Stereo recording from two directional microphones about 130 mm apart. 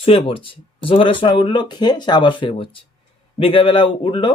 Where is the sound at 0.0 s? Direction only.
45° left (ahead or behind).